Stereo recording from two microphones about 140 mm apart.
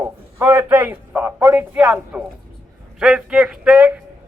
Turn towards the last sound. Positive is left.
turn(degrees=-10)  # may be behind; listen again after turning